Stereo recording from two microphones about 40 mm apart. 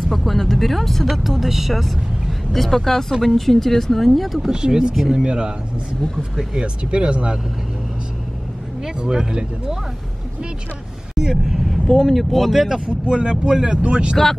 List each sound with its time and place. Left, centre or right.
0.1 s speech: centre
4.4 s speech: centre
6.5 s speech: right
8.8 s speech: centre
11.1 s speech: centre
11.9 s speech: centre
12.8 s speech: right